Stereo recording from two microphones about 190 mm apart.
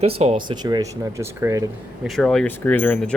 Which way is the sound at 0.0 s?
35° right (ahead or behind).